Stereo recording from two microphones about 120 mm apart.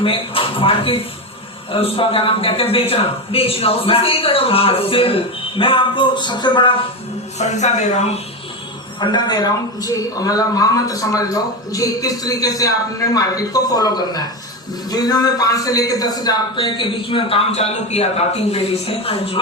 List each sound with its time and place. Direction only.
0.0 s a man's voice: 50° left (ahead or behind)
7.3 s a man's voice: 70° left (ahead or behind)
9.0 s a man's voice: 40° left (ahead or behind); by 19.4 s 55° left (ahead or behind)